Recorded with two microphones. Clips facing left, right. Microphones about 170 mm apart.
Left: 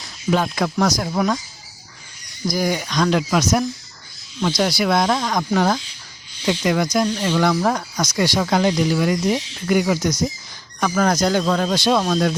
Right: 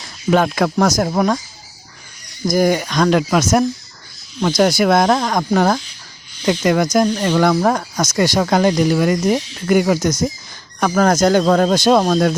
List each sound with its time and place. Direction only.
0.3 s speech: 60° right (ahead or behind)
2.5 s speech: 50° right (ahead or behind)